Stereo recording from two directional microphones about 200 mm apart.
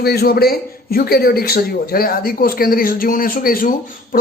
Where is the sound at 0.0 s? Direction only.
50° left (ahead or behind).